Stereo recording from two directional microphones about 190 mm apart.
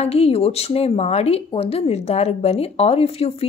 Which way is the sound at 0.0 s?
30° left (ahead or behind).